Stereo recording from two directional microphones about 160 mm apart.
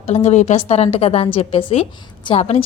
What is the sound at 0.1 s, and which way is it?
A woman's voice, 40° left (ahead or behind).